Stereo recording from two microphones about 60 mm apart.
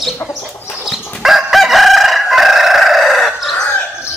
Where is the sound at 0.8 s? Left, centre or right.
Centre.